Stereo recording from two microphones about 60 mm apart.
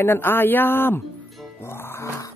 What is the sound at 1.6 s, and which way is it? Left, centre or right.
Music, left.